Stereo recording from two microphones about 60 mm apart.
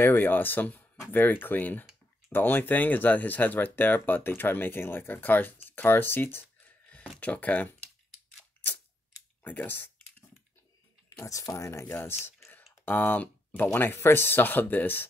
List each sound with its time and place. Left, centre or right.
0.0 s speech: left
7.2 s speech: left
9.4 s computer keyboard: left
11.2 s speech: left
11.5 s speech: left
11.9 s speech: left